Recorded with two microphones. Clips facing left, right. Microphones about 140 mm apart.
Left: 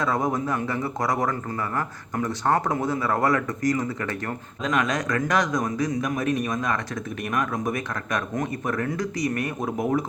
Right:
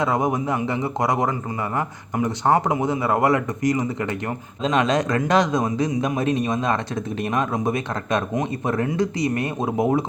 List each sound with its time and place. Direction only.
0.0 s speech: 20° right (ahead or behind)